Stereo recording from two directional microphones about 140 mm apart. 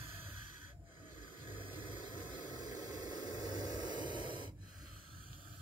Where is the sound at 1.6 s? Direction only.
35° right (ahead or behind).